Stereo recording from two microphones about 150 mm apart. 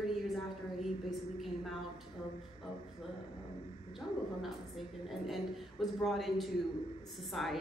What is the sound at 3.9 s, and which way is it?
A woman's voice, centre (ahead or behind).